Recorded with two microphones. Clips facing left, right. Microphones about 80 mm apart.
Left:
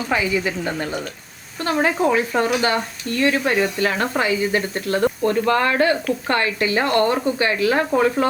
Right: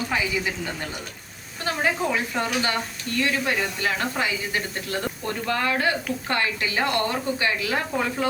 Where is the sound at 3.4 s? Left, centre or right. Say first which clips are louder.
Left 6 dB; left.